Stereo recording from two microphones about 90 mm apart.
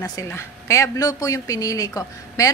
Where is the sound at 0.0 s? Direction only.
35° left (ahead or behind).